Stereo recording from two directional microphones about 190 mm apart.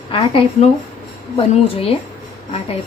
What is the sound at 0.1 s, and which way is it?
Speech, 30° left (ahead or behind).